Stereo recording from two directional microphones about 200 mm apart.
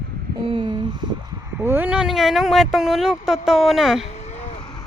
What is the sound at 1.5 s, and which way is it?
Speech, 10° right (ahead or behind).